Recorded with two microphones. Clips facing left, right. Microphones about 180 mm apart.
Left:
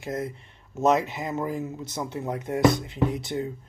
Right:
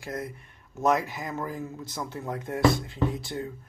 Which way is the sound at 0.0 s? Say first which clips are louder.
Left 4 dB; 25° left (ahead or behind).